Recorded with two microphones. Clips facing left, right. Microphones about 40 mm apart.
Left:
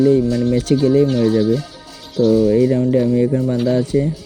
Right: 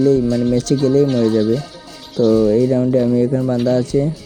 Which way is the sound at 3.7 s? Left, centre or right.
Centre.